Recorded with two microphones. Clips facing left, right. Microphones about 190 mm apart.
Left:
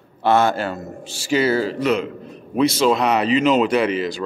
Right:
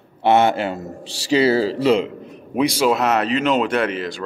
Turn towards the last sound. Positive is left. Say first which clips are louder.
# left 2 dB
turn(degrees=0)  # may be behind; listen again after turning